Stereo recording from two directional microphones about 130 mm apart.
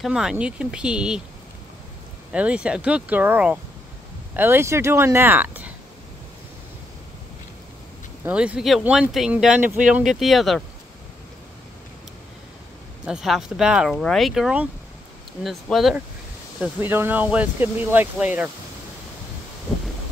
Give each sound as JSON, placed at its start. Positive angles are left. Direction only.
{"t": 0.0, "sound": "speech", "side_deg": -5}
{"t": 2.3, "sound": "speech", "side_deg": -10}
{"t": 8.2, "sound": "speech", "side_deg": -10}
{"t": 8.8, "sound": "speech", "side_deg": -10}
{"t": 13.0, "sound": "speech", "side_deg": -5}
{"t": 16.6, "sound": "speech", "side_deg": -15}